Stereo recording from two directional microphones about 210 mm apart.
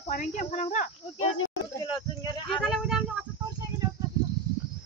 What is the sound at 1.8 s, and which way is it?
Speech, 20° left (ahead or behind).